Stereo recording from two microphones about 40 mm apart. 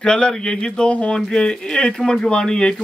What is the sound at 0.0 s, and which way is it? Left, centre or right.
Speech, left.